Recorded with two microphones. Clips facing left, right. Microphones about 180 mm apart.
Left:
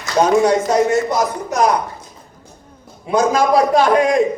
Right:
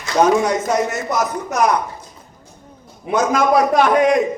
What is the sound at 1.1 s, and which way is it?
Speech, 30° left (ahead or behind).